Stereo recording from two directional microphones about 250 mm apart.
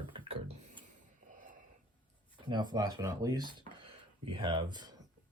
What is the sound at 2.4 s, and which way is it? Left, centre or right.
Speech, centre.